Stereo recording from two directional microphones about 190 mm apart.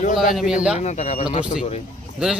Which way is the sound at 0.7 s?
35° left (ahead or behind).